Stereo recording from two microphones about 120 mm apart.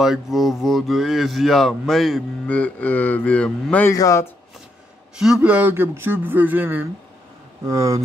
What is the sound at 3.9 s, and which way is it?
Speech, 25° left (ahead or behind).